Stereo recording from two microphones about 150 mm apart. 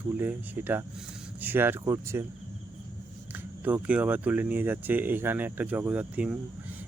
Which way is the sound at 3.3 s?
10° right (ahead or behind).